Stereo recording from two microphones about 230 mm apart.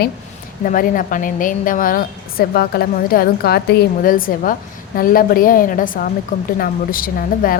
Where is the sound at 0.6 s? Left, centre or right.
Left.